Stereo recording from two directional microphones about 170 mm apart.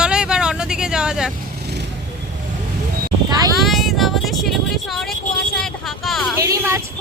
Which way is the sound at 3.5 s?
Centre (ahead or behind).